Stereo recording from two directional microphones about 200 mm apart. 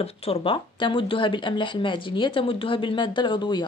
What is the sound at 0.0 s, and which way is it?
Speech, 30° left (ahead or behind).